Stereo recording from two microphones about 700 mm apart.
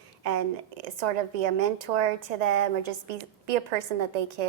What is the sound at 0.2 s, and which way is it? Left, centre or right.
A woman's voice, right.